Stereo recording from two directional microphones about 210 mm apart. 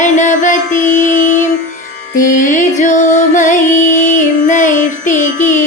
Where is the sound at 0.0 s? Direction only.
35° left (ahead or behind).